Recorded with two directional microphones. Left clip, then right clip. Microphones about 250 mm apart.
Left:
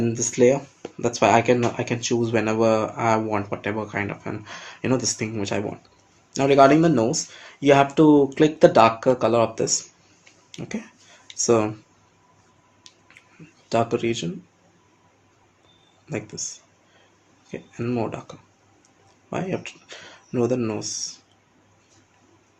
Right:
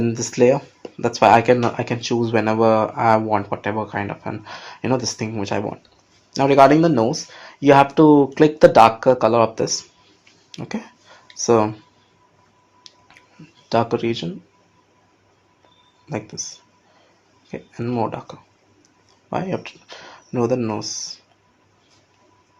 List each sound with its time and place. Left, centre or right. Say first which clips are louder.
0.0 s speech: right 2 dB; centre
12.9 s a sound: right 4 dB; centre
13.9 s speech: right 2 dB; centre
16.0 s speech: right 3 dB; centre
17.5 s speech: right 2 dB; centre